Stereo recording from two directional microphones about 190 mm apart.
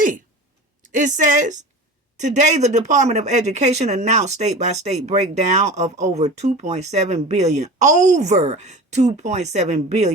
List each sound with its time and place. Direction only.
0.8 s a woman's voice: 40° right (ahead or behind)